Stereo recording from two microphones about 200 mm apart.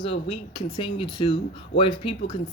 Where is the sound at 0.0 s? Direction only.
25° left (ahead or behind).